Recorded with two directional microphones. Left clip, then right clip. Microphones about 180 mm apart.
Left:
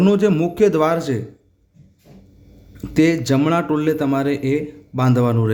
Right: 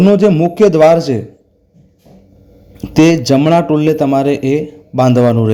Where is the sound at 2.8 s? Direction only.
25° right (ahead or behind).